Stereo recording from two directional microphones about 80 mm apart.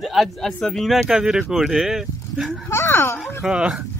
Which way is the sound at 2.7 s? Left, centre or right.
Left.